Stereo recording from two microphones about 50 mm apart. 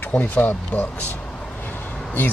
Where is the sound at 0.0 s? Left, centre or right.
Left.